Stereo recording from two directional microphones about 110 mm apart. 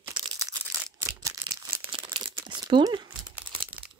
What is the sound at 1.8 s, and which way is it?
Crumpling, 50° right (ahead or behind).